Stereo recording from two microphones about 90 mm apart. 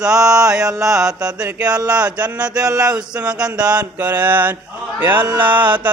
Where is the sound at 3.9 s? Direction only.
20° right (ahead or behind).